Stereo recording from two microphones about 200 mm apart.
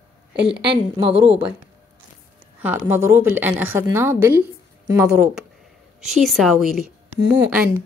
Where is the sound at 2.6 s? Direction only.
10° right (ahead or behind).